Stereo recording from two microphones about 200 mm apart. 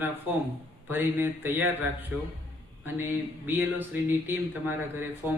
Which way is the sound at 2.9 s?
10° right (ahead or behind).